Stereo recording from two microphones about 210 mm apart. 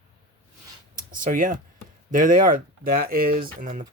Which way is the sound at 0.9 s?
40° right (ahead or behind).